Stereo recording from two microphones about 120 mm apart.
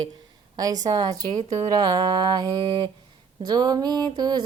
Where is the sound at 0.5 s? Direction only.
30° right (ahead or behind).